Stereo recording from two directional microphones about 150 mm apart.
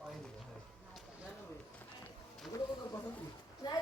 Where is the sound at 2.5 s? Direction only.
20° left (ahead or behind).